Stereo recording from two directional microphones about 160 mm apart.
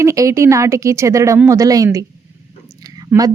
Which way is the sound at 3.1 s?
10° right (ahead or behind).